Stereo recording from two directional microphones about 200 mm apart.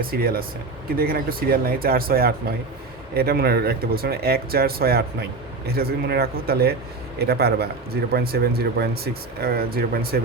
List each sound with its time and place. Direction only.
0.0 s speech: 50° right (ahead or behind)